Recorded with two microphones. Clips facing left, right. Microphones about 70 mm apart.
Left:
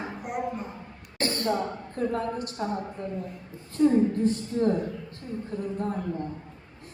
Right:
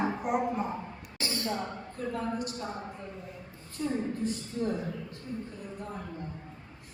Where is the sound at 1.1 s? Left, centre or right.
Left.